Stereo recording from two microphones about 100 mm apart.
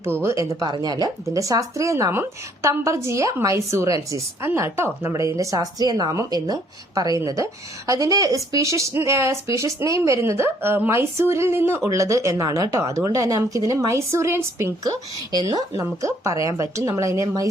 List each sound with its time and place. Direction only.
0.0 s speech: 25° right (ahead or behind)
14.8 s speech: 40° right (ahead or behind)